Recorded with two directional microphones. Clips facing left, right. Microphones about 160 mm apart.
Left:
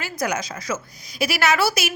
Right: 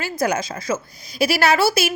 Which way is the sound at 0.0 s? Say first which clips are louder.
Right 4 dB; 30° right (ahead or behind).